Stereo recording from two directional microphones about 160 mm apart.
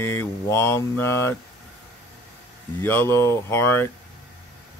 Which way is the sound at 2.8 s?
10° left (ahead or behind).